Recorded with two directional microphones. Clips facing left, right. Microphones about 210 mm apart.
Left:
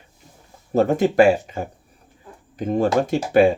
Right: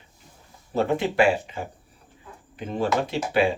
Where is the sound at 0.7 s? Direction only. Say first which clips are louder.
Left 6 dB; 45° left (ahead or behind).